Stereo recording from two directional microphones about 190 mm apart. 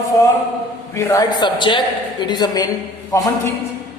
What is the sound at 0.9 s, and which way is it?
A man's voice, 15° left (ahead or behind).